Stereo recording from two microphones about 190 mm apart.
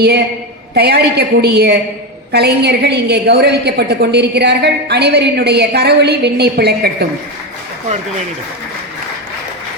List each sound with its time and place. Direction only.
0.7 s a woman's voice: 60° right (ahead or behind)